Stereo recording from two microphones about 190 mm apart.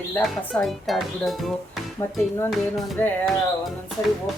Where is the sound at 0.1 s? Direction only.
Centre (ahead or behind).